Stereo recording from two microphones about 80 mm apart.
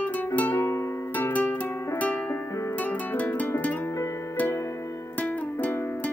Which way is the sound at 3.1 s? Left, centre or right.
Left.